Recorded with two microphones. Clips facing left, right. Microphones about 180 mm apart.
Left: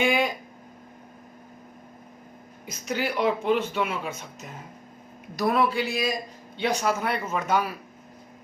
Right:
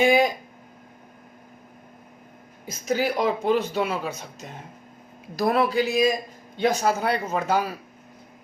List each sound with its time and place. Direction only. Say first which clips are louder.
0.0 s speech: right 5 dB; 40° right (ahead or behind)
2.8 s speech: right 2 dB; 40° right (ahead or behind)